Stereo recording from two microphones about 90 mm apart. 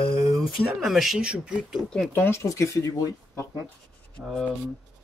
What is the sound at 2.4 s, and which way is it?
Speech, 35° left (ahead or behind).